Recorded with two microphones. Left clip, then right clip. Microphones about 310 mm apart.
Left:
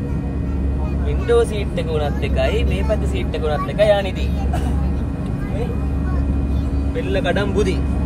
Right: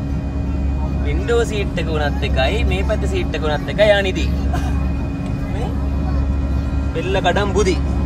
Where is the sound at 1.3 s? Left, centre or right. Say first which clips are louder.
Left 2 dB; right.